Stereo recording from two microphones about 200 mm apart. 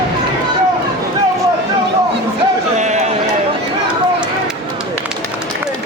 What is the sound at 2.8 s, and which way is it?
Run, 35° right (ahead or behind).